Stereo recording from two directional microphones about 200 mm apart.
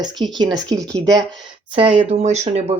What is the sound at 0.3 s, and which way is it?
Speech, 20° right (ahead or behind).